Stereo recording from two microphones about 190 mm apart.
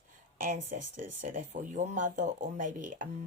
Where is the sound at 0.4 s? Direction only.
40° right (ahead or behind).